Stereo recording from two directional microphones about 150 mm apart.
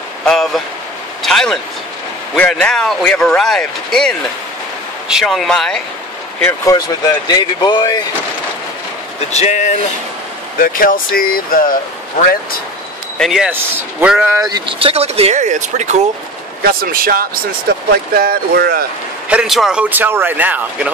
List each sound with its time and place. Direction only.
0.2 s speech: centre (ahead or behind)
6.4 s speech: 20° left (ahead or behind)
9.3 s speech: 50° left (ahead or behind)
10.6 s speech: 70° left (ahead or behind)
13.2 s speech: centre (ahead or behind)
13.5 s speech: 15° right (ahead or behind)
14.5 s speech: 35° right (ahead or behind); by 16.0 s 55° right (ahead or behind)
16.6 s speech: 75° right (ahead or behind)
19.2 s speech: 5° right (ahead or behind)